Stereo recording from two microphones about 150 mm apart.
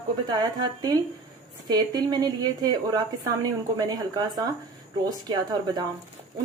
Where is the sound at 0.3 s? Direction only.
25° right (ahead or behind).